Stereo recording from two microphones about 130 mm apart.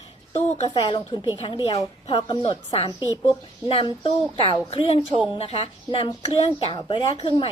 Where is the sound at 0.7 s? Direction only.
35° left (ahead or behind).